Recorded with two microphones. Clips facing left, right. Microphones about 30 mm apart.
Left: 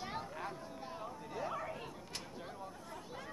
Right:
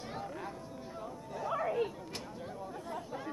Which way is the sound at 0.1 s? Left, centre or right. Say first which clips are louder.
Right 2 dB; centre.